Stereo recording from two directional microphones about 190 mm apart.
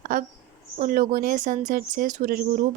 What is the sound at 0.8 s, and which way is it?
Speech, 45° right (ahead or behind).